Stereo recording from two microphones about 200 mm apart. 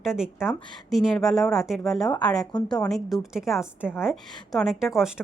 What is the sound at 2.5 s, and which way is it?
Speech, 20° left (ahead or behind).